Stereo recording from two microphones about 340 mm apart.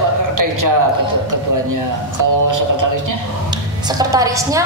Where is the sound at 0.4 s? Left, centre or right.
Right.